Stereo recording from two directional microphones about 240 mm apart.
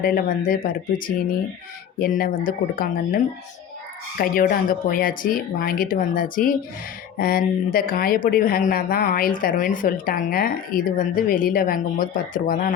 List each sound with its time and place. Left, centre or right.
0.0 s a woman's voice: left
4.2 s a woman's voice: left